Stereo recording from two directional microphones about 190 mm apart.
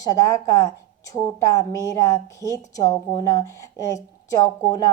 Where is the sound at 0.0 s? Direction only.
20° left (ahead or behind).